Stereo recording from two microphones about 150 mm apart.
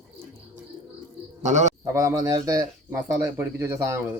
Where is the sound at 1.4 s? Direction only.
50° right (ahead or behind).